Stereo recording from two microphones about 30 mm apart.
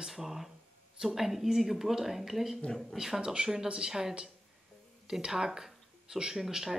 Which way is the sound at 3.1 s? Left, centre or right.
Right.